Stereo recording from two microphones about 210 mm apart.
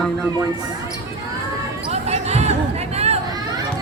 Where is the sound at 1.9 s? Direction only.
30° right (ahead or behind).